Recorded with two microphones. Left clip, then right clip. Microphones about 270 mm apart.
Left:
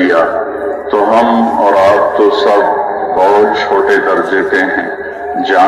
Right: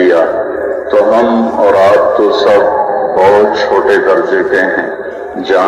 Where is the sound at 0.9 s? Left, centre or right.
Left.